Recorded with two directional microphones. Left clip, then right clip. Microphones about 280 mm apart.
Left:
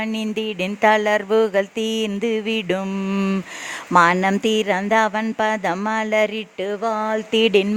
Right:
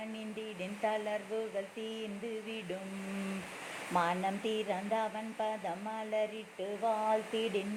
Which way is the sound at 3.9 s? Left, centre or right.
Left.